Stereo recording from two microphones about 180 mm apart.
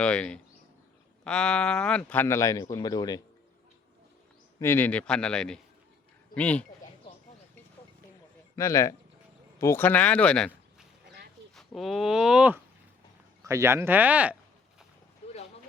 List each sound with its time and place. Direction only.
0.0 s speech: 5° left (ahead or behind); by 3.2 s 20° left (ahead or behind)
4.6 s speech: 10° left (ahead or behind)
8.5 s speech: 15° left (ahead or behind); by 12.5 s 5° right (ahead or behind)
13.4 s speech: 15° right (ahead or behind)
15.2 s a sound: 35° left (ahead or behind)